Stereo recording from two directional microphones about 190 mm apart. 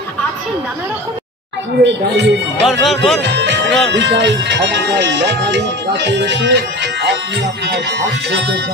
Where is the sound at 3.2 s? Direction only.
65° right (ahead or behind).